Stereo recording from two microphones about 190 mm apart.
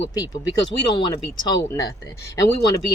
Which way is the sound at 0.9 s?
25° left (ahead or behind).